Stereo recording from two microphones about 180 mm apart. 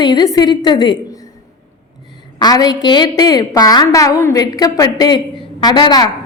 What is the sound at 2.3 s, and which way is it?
A woman's voice, 20° left (ahead or behind).